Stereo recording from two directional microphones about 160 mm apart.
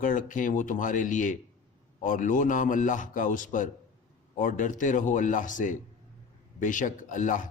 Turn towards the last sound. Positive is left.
turn(degrees=55)  # may be behind; listen again after turning